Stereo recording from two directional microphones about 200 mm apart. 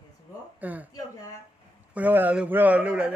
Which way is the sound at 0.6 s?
10° right (ahead or behind).